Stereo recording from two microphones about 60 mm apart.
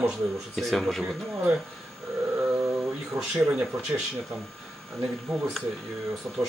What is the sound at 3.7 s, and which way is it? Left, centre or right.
Speech, right.